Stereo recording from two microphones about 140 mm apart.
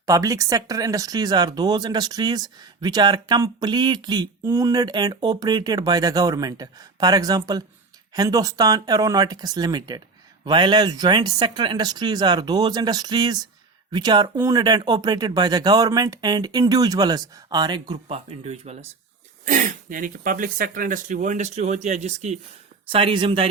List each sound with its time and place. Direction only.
0.0 s speech: 25° right (ahead or behind)
18.1 s speech: 45° right (ahead or behind)
19.5 s speech: 70° right (ahead or behind)
22.9 s speech: 40° right (ahead or behind)